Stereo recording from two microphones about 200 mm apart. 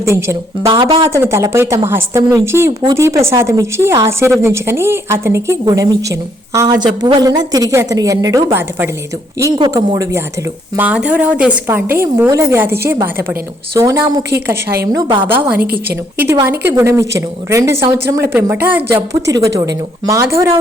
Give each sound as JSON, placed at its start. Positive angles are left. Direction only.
{"t": 0.0, "sound": "speech", "side_deg": -15}
{"t": 0.7, "sound": "speech", "side_deg": -25}
{"t": 1.1, "sound": "speech", "side_deg": -15}
{"t": 14.9, "sound": "speech", "side_deg": -25}
{"t": 15.3, "sound": "speech", "side_deg": -10}
{"t": 15.6, "sound": "a woman's voice", "side_deg": -50}
{"t": 16.1, "sound": "speech", "side_deg": -10}